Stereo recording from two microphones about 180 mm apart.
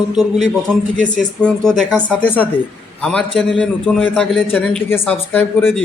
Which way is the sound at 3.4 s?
5° left (ahead or behind).